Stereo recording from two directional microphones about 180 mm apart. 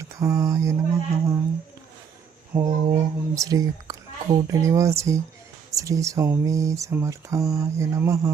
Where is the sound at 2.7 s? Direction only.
20° right (ahead or behind).